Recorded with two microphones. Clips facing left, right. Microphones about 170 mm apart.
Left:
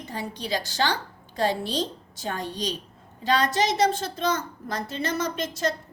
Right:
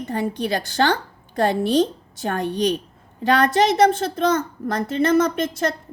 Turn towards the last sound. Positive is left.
turn(degrees=-55)  # may be behind; listen again after turning